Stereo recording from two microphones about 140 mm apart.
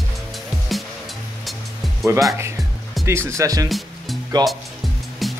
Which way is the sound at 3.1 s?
20° right (ahead or behind).